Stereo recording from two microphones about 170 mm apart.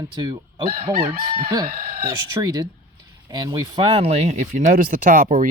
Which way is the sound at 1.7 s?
55° right (ahead or behind).